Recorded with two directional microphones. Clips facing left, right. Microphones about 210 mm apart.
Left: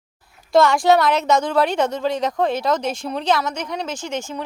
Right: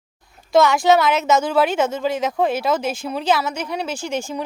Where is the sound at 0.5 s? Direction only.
Centre (ahead or behind).